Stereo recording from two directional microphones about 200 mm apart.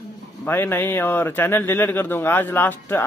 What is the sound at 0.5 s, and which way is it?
A man's voice, 10° left (ahead or behind).